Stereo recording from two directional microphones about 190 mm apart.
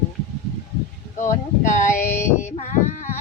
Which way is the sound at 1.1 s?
40° left (ahead or behind).